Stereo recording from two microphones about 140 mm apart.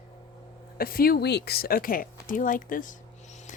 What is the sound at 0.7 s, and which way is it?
Speech, 90° left.